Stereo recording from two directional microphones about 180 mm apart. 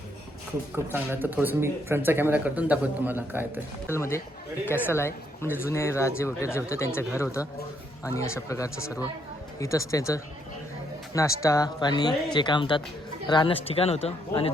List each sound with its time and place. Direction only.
0.9 s speech: 10° right (ahead or behind)
3.8 s speech: 15° left (ahead or behind); by 14.5 s 35° left (ahead or behind)